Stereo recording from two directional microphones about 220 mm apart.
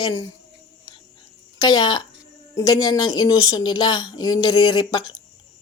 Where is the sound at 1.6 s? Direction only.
20° left (ahead or behind).